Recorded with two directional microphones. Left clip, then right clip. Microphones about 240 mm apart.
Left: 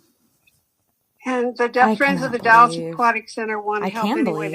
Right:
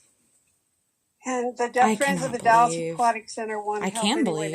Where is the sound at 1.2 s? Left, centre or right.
Left.